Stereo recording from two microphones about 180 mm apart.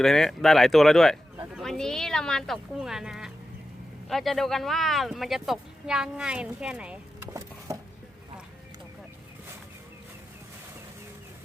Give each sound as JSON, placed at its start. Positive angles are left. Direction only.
{"t": 0.0, "sound": "speech", "side_deg": 0}
{"t": 7.7, "sound": "chopping", "side_deg": -15}